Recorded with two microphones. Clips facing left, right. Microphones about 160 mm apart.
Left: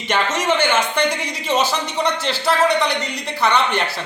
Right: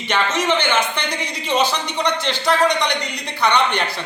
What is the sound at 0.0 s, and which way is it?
A man's voice, 10° left (ahead or behind).